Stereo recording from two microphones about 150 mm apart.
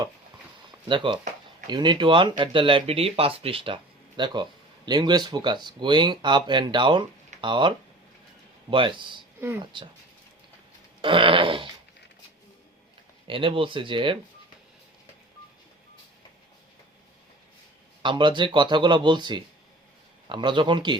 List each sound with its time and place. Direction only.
0.9 s speech: 30° right (ahead or behind)
8.7 s speech: 35° right (ahead or behind)
11.0 s speech: 35° right (ahead or behind)
13.2 s speech: 35° right (ahead or behind)
18.0 s speech: 30° right (ahead or behind)